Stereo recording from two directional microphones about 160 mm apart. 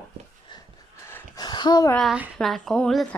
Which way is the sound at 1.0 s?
15° left (ahead or behind).